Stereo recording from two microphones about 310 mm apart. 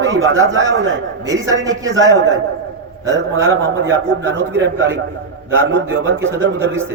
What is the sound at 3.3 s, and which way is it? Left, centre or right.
A man's voice, right.